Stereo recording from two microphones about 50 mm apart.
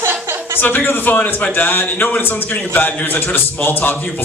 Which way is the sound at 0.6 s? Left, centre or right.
Left.